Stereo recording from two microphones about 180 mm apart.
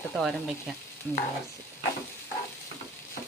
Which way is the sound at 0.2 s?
Centre (ahead or behind).